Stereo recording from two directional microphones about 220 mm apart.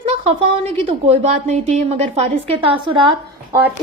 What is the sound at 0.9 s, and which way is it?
A woman's voice, 30° right (ahead or behind).